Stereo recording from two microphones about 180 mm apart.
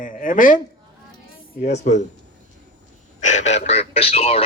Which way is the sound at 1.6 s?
40° left (ahead or behind).